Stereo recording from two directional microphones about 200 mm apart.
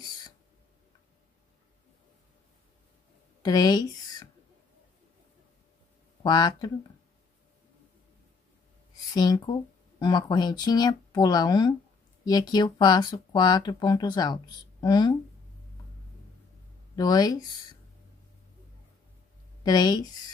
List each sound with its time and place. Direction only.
3.4 s speech: 20° left (ahead or behind)
6.2 s speech: 20° left (ahead or behind)
9.1 s speech: 20° left (ahead or behind)
16.9 s speech: 20° left (ahead or behind)
19.6 s speech: 20° left (ahead or behind)